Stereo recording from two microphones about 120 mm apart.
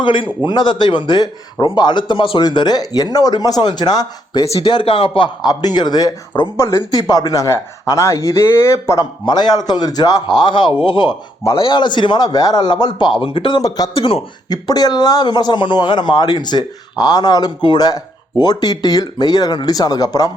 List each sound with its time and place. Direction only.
0.0 s speech: 45° left (ahead or behind)
4.4 s speech: 50° left (ahead or behind); by 9.0 s 25° left (ahead or behind)
9.2 s speech: 35° left (ahead or behind)
13.6 s speech: 30° left (ahead or behind)
13.9 s speech: 50° left (ahead or behind)
14.5 s speech: 35° left (ahead or behind)